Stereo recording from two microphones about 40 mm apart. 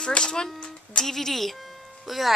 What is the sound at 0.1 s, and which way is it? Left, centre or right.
Speech, centre.